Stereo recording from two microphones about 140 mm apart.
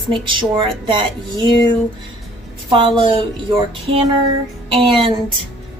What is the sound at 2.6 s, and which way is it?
Speech, 35° right (ahead or behind).